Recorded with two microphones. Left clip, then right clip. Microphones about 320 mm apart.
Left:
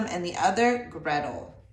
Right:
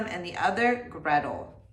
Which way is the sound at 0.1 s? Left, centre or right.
Centre.